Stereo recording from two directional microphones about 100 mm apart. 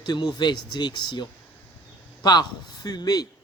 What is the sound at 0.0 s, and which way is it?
Speech, 45° left (ahead or behind).